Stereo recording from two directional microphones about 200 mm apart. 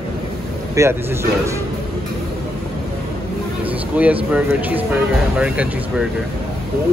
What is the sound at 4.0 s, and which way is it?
Speech, 5° right (ahead or behind).